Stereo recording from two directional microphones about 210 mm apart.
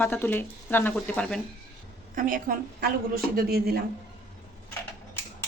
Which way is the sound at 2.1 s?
40° right (ahead or behind).